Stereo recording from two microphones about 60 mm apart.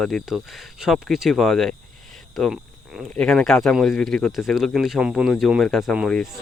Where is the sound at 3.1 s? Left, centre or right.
Centre.